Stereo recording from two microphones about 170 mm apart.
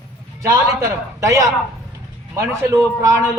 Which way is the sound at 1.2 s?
20° right (ahead or behind).